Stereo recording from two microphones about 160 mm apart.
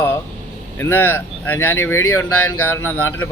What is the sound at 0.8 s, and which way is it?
Speech, 10° left (ahead or behind).